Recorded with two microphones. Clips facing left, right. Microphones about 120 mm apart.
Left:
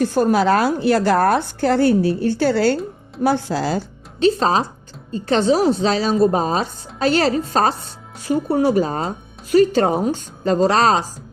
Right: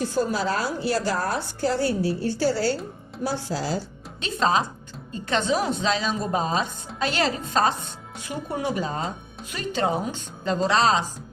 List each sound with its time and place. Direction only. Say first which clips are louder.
0.0 s a woman's voice: left 8 dB; 60° left (ahead or behind)
4.2 s a woman's voice: left 7 dB; 35° left (ahead or behind)